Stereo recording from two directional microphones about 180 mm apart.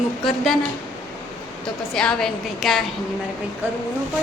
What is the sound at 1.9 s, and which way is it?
Speech, 5° left (ahead or behind).